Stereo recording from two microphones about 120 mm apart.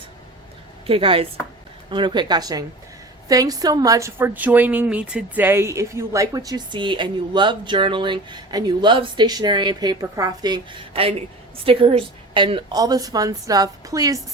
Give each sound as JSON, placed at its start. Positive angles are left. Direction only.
{"t": 0.9, "sound": "speech", "side_deg": -50}
{"t": 4.2, "sound": "speech", "side_deg": -15}